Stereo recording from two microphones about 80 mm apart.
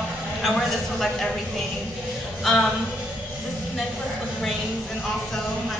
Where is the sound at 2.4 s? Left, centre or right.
Centre.